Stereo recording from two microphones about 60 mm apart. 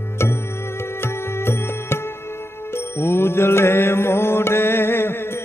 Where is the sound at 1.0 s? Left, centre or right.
Left.